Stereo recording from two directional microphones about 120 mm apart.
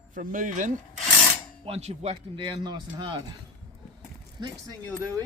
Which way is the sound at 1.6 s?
60° right (ahead or behind).